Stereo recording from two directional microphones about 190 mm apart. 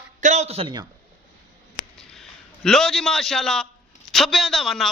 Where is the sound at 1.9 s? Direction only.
Centre (ahead or behind).